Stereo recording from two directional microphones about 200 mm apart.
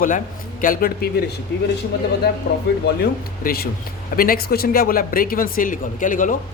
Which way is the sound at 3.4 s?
50° left (ahead or behind).